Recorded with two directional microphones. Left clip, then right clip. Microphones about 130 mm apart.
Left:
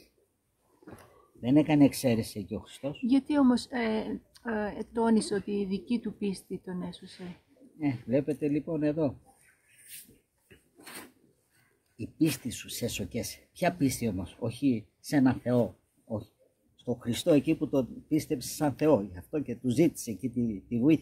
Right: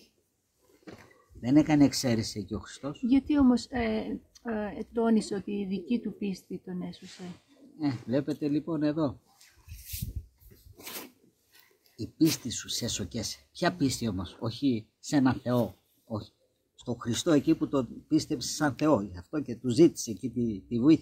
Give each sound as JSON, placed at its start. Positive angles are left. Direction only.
{"t": 1.4, "sound": "speech", "side_deg": 5}
{"t": 3.1, "sound": "speech", "side_deg": 25}
{"t": 7.8, "sound": "speech", "side_deg": 5}
{"t": 12.0, "sound": "speech", "side_deg": 5}
{"t": 16.8, "sound": "speech", "side_deg": 5}